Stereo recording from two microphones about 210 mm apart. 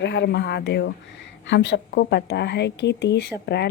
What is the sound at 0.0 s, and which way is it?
Speech, 55° left (ahead or behind).